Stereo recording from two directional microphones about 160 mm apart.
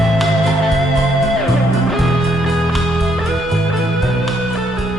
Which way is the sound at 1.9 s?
Centre (ahead or behind).